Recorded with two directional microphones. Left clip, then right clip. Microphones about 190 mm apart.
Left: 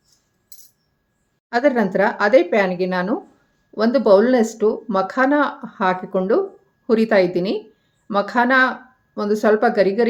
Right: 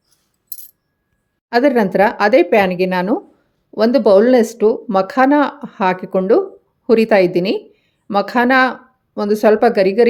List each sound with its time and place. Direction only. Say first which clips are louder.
1.5 s speech: right 4 dB; 35° right (ahead or behind)